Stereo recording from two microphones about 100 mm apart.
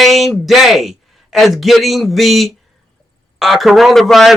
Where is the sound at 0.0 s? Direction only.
Centre (ahead or behind).